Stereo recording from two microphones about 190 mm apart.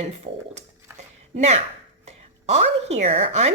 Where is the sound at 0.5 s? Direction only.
35° right (ahead or behind).